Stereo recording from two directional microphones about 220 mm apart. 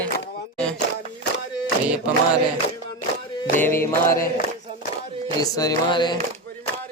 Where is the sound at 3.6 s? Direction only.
10° left (ahead or behind).